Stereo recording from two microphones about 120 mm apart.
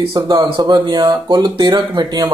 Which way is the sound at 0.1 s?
30° right (ahead or behind).